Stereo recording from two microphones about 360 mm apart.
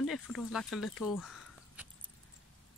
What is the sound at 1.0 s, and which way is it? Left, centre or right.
Crow, centre.